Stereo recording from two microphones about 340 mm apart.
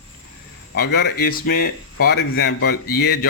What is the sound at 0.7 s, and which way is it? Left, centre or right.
Speech, left.